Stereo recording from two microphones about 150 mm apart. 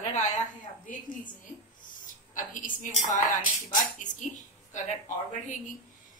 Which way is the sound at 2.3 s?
60° left (ahead or behind).